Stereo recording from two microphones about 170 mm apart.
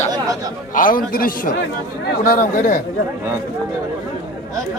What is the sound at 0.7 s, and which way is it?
A man's voice, 55° left (ahead or behind).